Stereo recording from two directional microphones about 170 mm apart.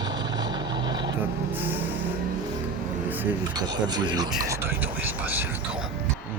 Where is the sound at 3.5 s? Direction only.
25° right (ahead or behind); by 5.9 s 5° right (ahead or behind).